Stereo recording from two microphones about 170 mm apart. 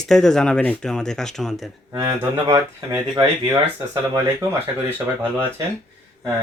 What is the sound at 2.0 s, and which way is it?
Speech, 15° right (ahead or behind).